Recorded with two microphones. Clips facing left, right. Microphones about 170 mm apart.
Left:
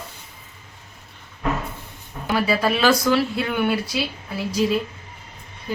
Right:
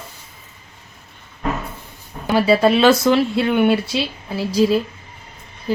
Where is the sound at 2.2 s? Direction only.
30° right (ahead or behind).